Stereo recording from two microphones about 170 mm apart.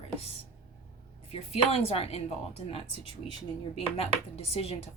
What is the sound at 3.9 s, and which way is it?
Speech, 35° left (ahead or behind).